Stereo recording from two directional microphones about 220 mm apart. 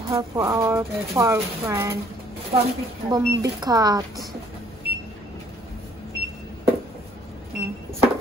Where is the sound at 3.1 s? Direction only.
20° right (ahead or behind).